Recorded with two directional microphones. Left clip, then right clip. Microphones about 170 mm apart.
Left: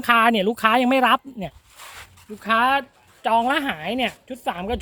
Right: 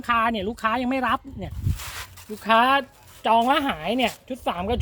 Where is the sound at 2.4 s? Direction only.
20° left (ahead or behind).